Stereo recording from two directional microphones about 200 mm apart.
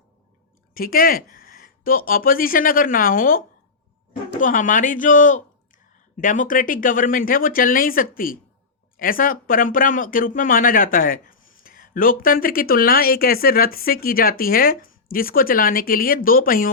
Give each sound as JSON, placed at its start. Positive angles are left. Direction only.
{"t": 0.7, "sound": "speech", "side_deg": 45}